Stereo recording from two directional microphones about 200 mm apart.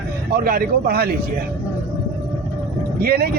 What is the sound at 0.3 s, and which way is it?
Speech, 45° right (ahead or behind).